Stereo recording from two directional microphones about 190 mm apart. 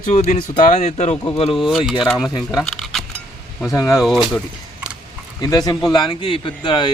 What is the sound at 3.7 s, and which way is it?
Speech, 15° left (ahead or behind).